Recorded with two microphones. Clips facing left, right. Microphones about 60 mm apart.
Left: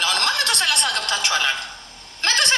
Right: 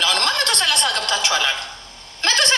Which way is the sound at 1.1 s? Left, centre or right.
Left.